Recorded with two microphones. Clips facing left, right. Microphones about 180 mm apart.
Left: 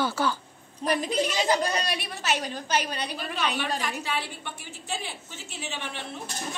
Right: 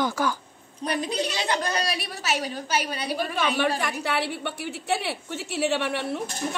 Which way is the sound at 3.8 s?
65° right (ahead or behind).